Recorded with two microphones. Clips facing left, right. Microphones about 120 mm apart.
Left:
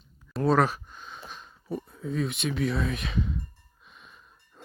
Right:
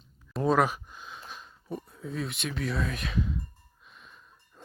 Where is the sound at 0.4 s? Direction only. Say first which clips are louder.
Left 1 dB; 10° right (ahead or behind).